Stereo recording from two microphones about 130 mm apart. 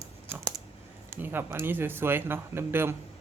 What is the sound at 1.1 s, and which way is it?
Speech, 15° right (ahead or behind).